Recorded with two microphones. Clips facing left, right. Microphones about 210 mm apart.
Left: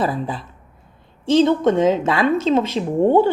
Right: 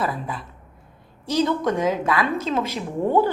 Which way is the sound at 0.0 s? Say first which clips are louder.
Left 5 dB; 30° left (ahead or behind).